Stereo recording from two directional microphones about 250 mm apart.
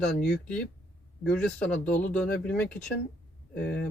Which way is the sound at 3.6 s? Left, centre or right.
Left.